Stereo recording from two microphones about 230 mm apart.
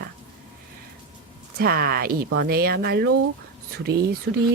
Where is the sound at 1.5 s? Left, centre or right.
Right.